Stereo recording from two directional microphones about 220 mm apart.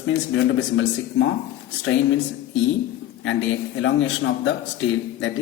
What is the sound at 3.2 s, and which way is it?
A man's voice, 60° left (ahead or behind).